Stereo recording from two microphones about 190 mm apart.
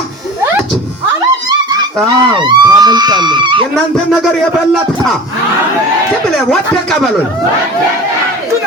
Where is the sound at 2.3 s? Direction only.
25° right (ahead or behind).